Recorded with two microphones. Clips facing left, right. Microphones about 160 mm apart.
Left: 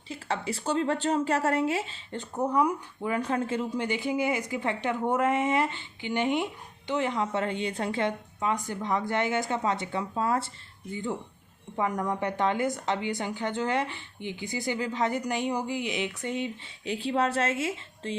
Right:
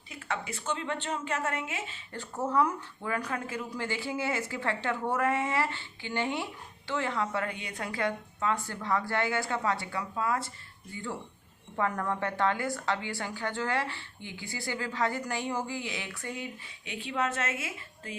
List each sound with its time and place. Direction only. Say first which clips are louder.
0.1 s speech: left 5 dB; 30° left (ahead or behind)
2.1 s speech: left 2 dB; 15° left (ahead or behind)
10.9 s speech: left 5 dB; 20° left (ahead or behind)
16.8 s speech: left 5 dB; 35° left (ahead or behind)